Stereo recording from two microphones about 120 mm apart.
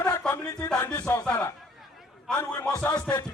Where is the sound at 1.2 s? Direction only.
10° left (ahead or behind).